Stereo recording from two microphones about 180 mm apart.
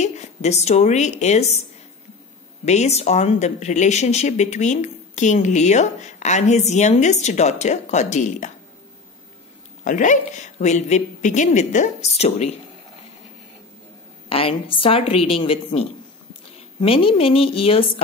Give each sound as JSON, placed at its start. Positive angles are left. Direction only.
{"t": 0.0, "sound": "a woman's voice", "side_deg": 40}
{"t": 2.6, "sound": "speech", "side_deg": 40}
{"t": 9.8, "sound": "speech", "side_deg": 45}
{"t": 14.3, "sound": "speech", "side_deg": 30}